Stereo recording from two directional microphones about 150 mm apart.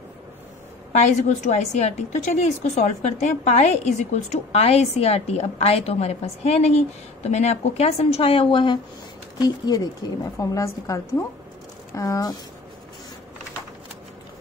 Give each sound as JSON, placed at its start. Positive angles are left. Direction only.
{"t": 1.0, "sound": "a woman's voice", "side_deg": 50}